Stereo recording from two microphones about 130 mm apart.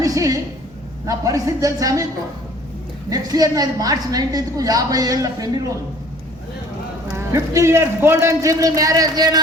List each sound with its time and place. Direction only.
0.0 s a sound: 25° right (ahead or behind)
1.0 s a woman's voice: 25° right (ahead or behind)
3.1 s a woman's voice: 30° right (ahead or behind)
7.1 s a woman's voice: 25° right (ahead or behind)